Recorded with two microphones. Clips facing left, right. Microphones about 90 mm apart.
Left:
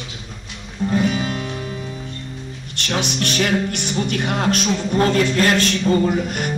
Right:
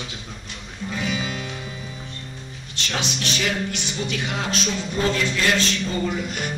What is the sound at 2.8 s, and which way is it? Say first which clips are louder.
Speech: left 5 dB; 55° left (ahead or behind).